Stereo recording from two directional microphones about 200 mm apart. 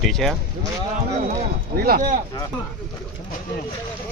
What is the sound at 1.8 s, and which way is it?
Speech, 50° right (ahead or behind).